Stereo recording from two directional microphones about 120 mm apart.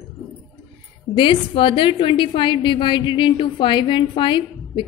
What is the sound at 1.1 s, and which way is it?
A woman's voice, 45° left (ahead or behind).